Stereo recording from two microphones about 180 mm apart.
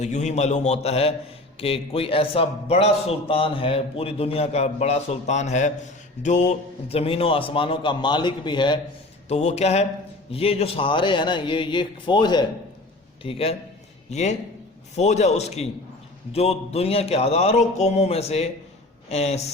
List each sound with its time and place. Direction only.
0.0 s a man's voice: 40° left (ahead or behind); by 8.8 s 25° left (ahead or behind)
9.3 s a man's voice: 40° left (ahead or behind)